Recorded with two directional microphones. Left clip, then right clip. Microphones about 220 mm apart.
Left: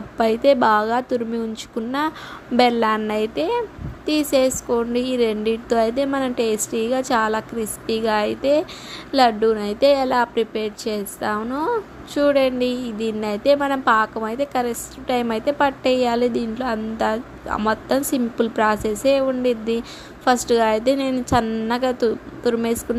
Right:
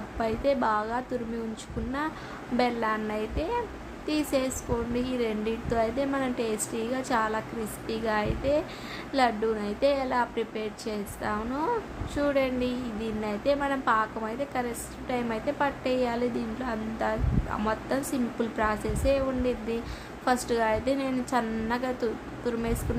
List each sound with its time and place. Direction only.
0.2 s a woman's voice: 35° left (ahead or behind)